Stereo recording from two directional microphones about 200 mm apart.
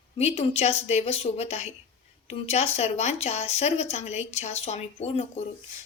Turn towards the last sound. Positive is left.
turn(degrees=30)  # may be behind; listen again after turning